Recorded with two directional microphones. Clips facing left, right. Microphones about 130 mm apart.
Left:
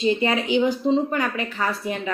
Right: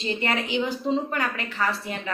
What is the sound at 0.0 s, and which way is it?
A woman's voice, 15° left (ahead or behind).